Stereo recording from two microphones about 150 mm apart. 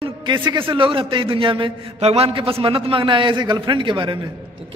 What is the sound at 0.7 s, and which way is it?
A man's voice, 35° right (ahead or behind).